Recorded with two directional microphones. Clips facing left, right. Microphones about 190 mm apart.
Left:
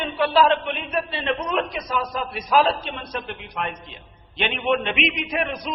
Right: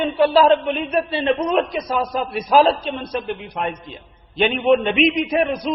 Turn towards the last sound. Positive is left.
turn(degrees=-35)  # may be behind; listen again after turning